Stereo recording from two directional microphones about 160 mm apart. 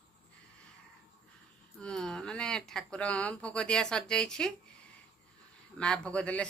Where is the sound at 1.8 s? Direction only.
5° left (ahead or behind).